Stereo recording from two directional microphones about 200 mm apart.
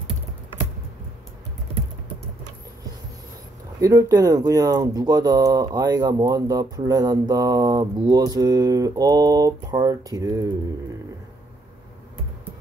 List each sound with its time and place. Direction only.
3.8 s speech: 15° right (ahead or behind)